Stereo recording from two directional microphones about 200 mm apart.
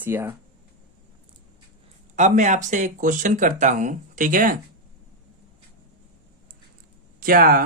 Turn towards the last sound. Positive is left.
turn(degrees=-45)  # may be behind; listen again after turning